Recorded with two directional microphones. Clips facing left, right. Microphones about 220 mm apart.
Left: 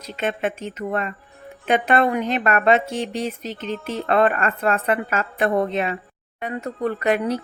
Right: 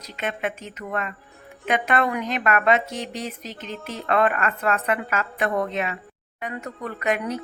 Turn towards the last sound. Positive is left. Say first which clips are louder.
# left 4 dB
turn(degrees=35)  # may be behind; listen again after turning